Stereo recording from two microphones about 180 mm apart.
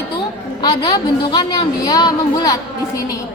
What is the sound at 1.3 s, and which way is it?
A woman's voice, 25° left (ahead or behind).